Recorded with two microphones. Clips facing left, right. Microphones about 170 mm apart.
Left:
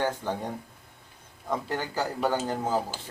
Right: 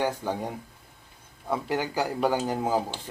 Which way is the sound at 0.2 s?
10° right (ahead or behind).